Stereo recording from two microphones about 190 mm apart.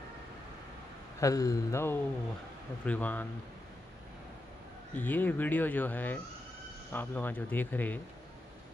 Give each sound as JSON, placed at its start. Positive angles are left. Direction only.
{"t": 1.2, "sound": "speech", "side_deg": 20}
{"t": 4.9, "sound": "speech", "side_deg": 10}